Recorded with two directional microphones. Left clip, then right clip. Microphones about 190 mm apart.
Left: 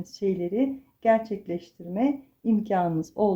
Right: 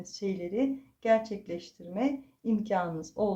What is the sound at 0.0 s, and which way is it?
Speech, 50° left (ahead or behind).